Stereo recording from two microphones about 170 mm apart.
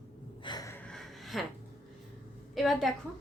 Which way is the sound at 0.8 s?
Centre (ahead or behind).